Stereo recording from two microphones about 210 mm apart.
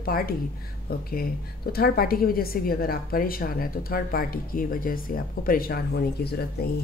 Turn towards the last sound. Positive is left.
turn(degrees=50)  # may be behind; listen again after turning